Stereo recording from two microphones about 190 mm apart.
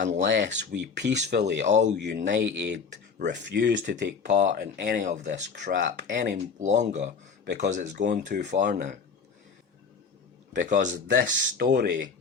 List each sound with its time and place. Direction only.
0.2 s speech: 65° right (ahead or behind)
4.2 s speech: 40° right (ahead or behind)
4.5 s speech: 60° right (ahead or behind); by 5.4 s 40° right (ahead or behind)
5.4 s speech: 65° right (ahead or behind)
6.6 s speech: 40° right (ahead or behind); by 9.0 s 55° right (ahead or behind)
10.5 s speech: 45° right (ahead or behind); by 12.0 s 60° right (ahead or behind)